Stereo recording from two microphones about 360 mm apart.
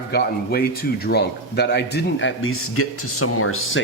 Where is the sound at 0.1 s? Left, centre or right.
Left.